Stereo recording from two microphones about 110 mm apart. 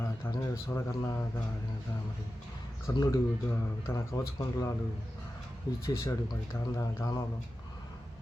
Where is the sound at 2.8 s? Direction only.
25° left (ahead or behind).